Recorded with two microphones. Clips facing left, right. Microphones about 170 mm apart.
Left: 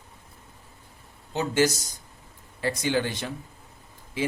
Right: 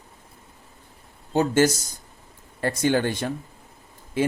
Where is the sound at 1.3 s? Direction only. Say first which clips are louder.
Right 4 dB; 50° right (ahead or behind).